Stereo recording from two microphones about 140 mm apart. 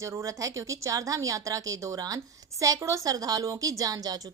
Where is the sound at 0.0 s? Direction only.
20° right (ahead or behind).